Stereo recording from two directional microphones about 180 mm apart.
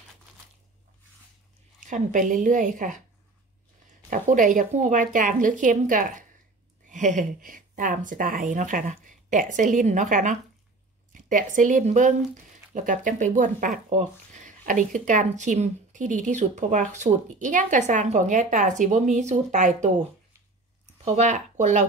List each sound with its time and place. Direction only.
1.8 s speech: 45° right (ahead or behind)
4.1 s speech: 45° right (ahead or behind)
21.0 s speech: 40° right (ahead or behind)